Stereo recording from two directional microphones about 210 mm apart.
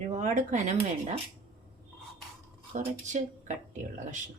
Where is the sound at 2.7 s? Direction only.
35° right (ahead or behind).